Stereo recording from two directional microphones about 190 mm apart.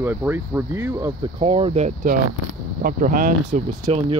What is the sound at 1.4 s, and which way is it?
Speech, 30° right (ahead or behind).